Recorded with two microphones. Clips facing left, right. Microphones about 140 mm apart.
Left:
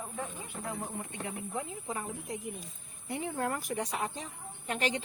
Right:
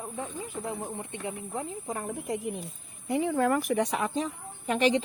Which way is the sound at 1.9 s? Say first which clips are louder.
Right 5 dB; 65° right (ahead or behind).